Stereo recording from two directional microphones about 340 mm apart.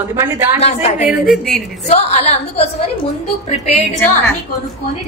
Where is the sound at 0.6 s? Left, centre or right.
Centre.